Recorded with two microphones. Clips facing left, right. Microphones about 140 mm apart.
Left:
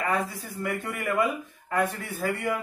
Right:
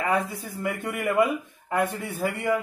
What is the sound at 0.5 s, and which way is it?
Speech, 15° right (ahead or behind).